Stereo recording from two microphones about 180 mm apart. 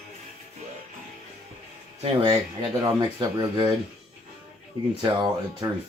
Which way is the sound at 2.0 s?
25° right (ahead or behind).